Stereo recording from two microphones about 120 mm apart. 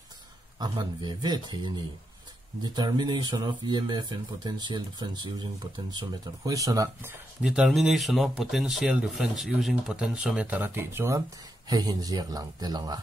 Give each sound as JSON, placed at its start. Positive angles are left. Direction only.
{"t": 0.6, "sound": "speech", "side_deg": -35}
{"t": 7.4, "sound": "speech", "side_deg": -5}
{"t": 11.7, "sound": "speech", "side_deg": -35}